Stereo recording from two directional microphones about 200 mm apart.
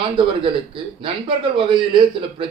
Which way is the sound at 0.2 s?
25° right (ahead or behind).